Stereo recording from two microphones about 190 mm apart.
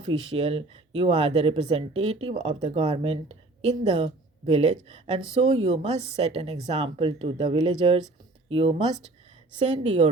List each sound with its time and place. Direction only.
0.0 s speech: 30° right (ahead or behind)